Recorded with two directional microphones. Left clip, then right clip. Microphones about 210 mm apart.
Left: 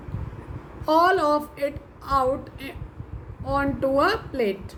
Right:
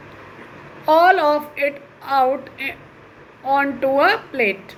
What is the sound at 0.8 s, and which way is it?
Speech, 20° left (ahead or behind).